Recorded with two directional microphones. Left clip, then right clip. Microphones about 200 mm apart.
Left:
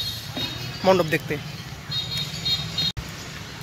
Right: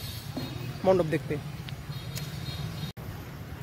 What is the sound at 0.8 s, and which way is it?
Speech, centre (ahead or behind).